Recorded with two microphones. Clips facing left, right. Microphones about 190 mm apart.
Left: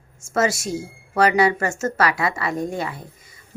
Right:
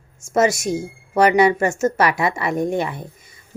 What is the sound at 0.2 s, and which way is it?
Speech, 20° right (ahead or behind).